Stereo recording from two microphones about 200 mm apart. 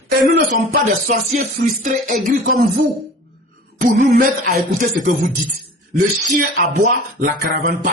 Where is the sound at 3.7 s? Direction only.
40° right (ahead or behind).